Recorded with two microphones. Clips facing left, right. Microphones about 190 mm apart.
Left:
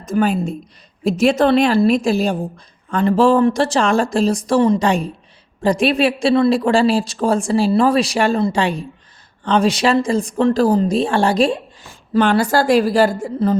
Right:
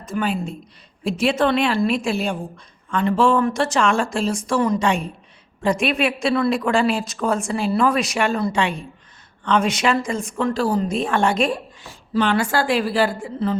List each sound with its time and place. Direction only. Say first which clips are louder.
0.0 s a woman's voice: left 6 dB; 45° left (ahead or behind)
11.9 s a woman's voice: left 5 dB; 50° left (ahead or behind)